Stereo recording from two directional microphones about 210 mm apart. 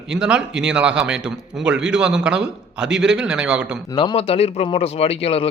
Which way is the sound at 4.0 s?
25° left (ahead or behind).